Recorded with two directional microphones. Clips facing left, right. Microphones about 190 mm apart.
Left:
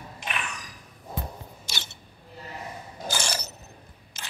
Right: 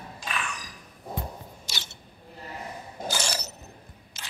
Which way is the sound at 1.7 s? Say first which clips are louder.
Left 2 dB; 55° left (ahead or behind).